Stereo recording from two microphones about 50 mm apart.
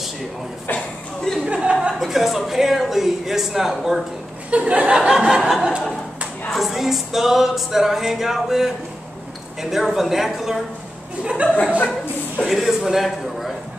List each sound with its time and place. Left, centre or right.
0.7 s a sound: centre
1.4 s a woman's voice: centre
4.5 s a woman's voice: right; by 5.7 s centre
6.5 s music: centre
11.2 s a woman's voice: centre
12.4 s music: centre